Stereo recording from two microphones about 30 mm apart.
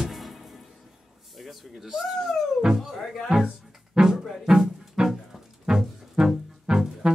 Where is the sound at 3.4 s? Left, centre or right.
Right.